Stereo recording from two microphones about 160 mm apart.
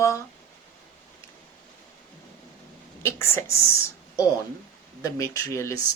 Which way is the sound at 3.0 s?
15° left (ahead or behind).